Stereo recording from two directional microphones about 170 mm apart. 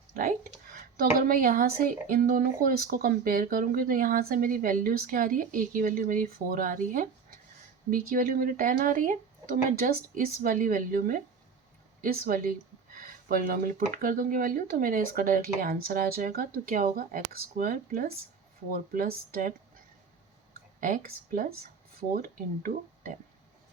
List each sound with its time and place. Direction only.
0.1 s a woman's voice: 50° right (ahead or behind)
20.8 s a woman's voice: 50° right (ahead or behind)